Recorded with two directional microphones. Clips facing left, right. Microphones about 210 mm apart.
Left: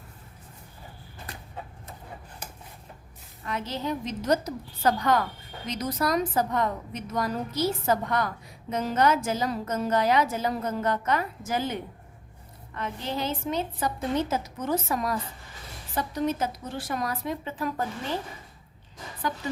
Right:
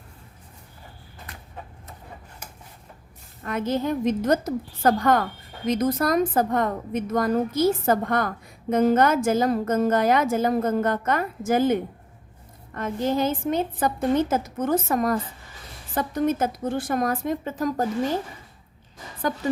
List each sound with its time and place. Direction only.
3.4 s a woman's voice: 50° right (ahead or behind)